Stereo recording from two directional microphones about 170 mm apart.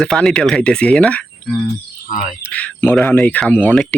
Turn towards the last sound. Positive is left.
turn(degrees=5)  # may be behind; listen again after turning